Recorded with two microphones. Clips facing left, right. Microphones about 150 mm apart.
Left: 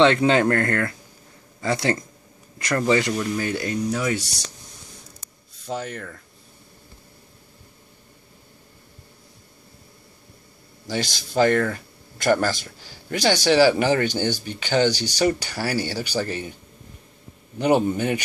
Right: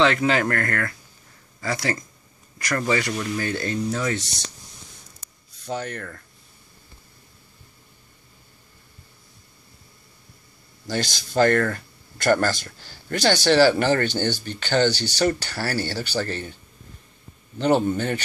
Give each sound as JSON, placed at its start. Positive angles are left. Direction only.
{"t": 0.0, "sound": "speech", "side_deg": 25}
{"t": 5.6, "sound": "speech", "side_deg": 5}
{"t": 10.9, "sound": "speech", "side_deg": 5}
{"t": 17.6, "sound": "speech", "side_deg": 10}